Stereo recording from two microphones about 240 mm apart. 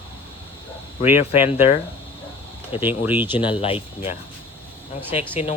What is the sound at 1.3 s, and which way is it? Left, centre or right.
Speech, centre.